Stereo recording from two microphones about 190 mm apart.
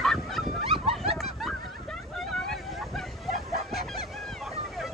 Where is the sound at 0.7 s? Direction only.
30° right (ahead or behind).